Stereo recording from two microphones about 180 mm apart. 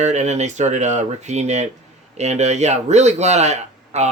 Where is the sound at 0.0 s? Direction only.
40° right (ahead or behind).